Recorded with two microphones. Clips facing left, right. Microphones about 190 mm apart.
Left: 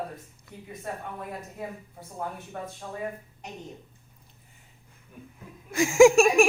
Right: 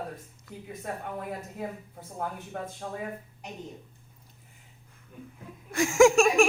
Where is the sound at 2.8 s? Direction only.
50° right (ahead or behind).